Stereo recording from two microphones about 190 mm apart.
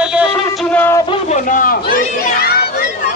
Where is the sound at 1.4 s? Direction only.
45° left (ahead or behind).